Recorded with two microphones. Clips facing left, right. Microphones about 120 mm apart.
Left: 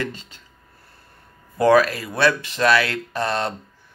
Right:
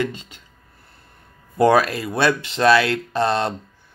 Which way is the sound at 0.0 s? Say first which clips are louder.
Right 4 dB; 15° right (ahead or behind).